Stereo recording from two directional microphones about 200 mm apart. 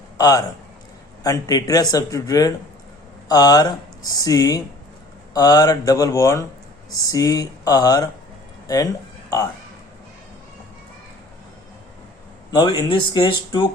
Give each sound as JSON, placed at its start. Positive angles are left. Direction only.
{"t": 0.2, "sound": "a man's voice", "side_deg": 20}
{"t": 12.5, "sound": "speech", "side_deg": 20}